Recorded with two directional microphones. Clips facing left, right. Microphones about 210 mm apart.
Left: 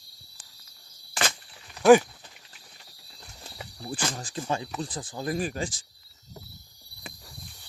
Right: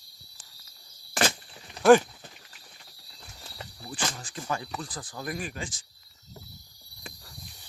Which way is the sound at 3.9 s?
35° left (ahead or behind).